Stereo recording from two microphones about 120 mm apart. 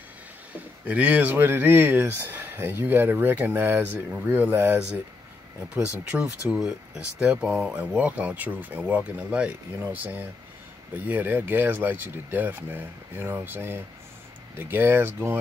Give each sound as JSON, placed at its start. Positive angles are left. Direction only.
{"t": 0.5, "sound": "speech", "side_deg": -10}